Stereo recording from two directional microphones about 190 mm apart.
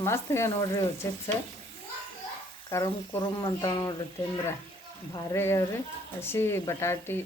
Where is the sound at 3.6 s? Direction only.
20° left (ahead or behind).